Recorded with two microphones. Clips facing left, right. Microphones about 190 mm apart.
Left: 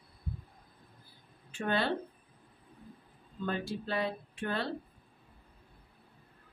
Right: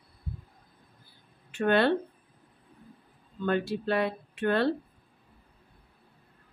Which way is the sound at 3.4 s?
65° right (ahead or behind).